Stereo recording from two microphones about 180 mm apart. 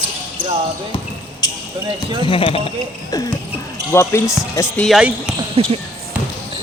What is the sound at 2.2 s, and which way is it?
Speech, 30° left (ahead or behind).